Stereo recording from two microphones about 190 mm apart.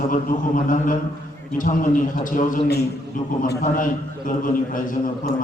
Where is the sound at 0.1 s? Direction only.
45° left (ahead or behind).